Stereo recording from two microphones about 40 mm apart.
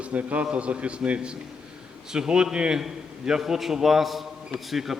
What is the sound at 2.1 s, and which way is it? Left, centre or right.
A man's voice, right.